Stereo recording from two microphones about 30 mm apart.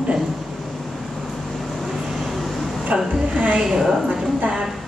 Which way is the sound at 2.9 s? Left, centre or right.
Right.